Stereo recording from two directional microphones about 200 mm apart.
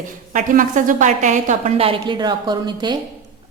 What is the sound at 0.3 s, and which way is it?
A woman's voice, 40° right (ahead or behind).